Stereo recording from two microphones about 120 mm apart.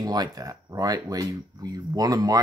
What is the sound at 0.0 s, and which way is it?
Speech, 30° right (ahead or behind).